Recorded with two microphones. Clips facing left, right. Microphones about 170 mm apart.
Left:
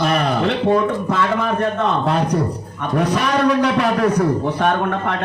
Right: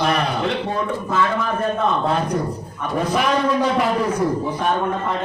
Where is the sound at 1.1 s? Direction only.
85° left.